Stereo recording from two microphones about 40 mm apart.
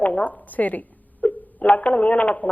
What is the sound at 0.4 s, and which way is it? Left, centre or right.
A woman's voice, left.